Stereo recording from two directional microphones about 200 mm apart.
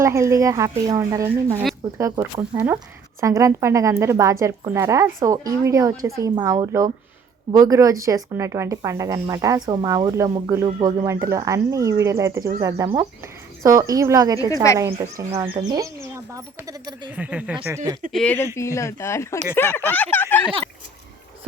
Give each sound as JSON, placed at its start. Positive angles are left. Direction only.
{"t": 0.0, "sound": "speech", "side_deg": -15}
{"t": 14.5, "sound": "speech", "side_deg": 15}
{"t": 14.8, "sound": "speech", "side_deg": -15}
{"t": 17.1, "sound": "speech", "side_deg": -5}
{"t": 18.1, "sound": "speech", "side_deg": 5}